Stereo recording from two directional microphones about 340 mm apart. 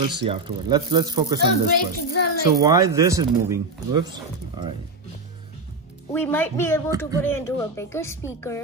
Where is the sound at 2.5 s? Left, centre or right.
Centre.